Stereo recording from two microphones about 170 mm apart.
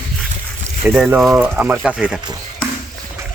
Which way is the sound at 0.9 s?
10° right (ahead or behind).